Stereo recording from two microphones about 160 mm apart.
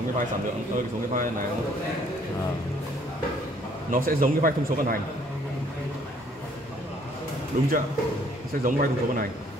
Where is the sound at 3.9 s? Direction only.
65° right (ahead or behind).